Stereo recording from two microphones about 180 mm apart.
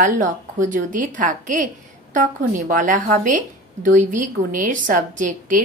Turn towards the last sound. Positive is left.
turn(degrees=-45)  # may be behind; listen again after turning